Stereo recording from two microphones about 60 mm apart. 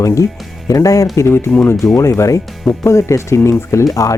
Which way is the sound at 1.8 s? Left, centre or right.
Left.